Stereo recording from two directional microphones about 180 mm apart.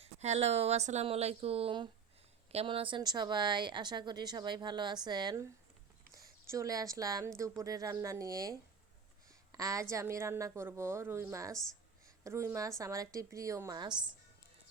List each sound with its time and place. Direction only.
0.0 s a woman's voice: 35° right (ahead or behind)